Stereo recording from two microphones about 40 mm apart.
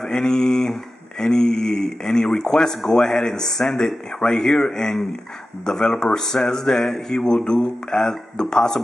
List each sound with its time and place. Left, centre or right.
0.1 s speech: centre
3.8 s speech: left